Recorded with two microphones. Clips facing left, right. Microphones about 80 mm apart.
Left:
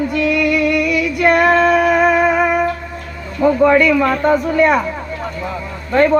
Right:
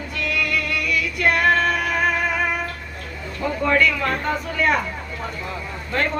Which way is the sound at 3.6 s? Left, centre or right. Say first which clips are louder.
Left 6 dB; left.